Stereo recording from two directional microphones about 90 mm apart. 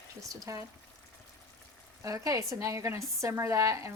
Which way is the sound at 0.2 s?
40° right (ahead or behind).